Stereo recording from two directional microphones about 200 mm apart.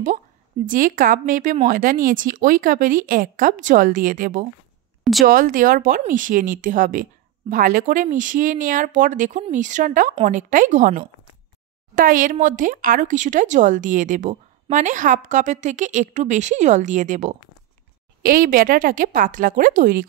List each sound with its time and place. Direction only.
0.7 s speech: 45° right (ahead or behind)